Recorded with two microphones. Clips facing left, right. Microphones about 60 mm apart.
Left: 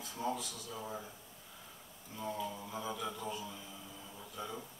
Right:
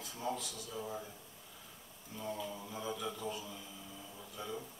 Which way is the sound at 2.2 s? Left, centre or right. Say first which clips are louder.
Left 2 dB; centre.